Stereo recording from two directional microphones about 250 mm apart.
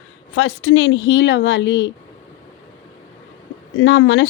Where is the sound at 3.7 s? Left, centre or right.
Left.